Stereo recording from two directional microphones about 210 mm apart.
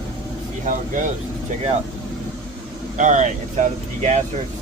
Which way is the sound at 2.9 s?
35° right (ahead or behind).